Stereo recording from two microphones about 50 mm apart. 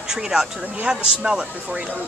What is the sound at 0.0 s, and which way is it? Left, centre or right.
Speech, centre.